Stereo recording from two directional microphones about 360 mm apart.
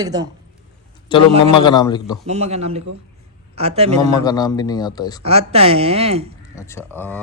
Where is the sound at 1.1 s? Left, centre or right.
Centre.